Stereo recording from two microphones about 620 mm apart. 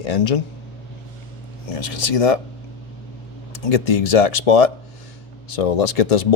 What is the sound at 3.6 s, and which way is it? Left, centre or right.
Speech, left.